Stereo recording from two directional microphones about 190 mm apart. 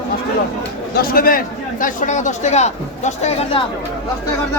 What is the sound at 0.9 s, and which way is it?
Speech, 50° left (ahead or behind).